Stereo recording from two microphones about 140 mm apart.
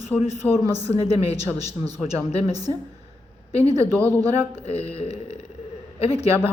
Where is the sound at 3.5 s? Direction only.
45° left (ahead or behind).